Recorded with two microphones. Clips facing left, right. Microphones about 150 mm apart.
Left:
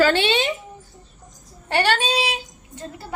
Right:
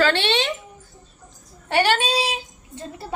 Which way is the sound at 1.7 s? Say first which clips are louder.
Right 1 dB; 5° right (ahead or behind).